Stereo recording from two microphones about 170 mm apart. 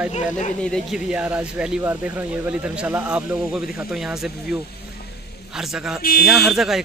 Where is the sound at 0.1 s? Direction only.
45° left (ahead or behind).